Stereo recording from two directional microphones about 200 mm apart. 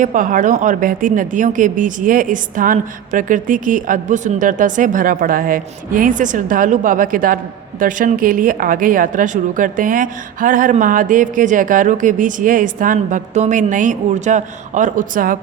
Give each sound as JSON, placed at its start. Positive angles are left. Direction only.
{"t": 0.0, "sound": "a woman's voice", "side_deg": -40}